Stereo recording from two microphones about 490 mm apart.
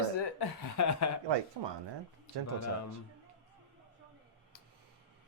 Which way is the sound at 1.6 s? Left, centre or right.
Right.